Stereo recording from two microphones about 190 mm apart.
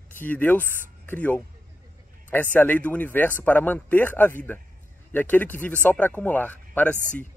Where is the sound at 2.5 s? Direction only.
10° left (ahead or behind).